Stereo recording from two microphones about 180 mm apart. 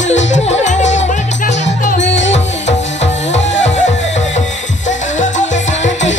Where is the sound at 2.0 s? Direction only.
85° left.